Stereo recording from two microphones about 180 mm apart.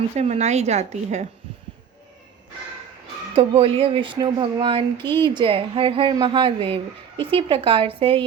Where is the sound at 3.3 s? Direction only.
30° right (ahead or behind).